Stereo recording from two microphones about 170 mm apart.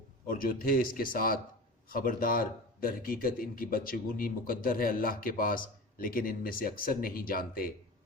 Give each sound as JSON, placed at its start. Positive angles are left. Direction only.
{"t": 0.3, "sound": "speech", "side_deg": 55}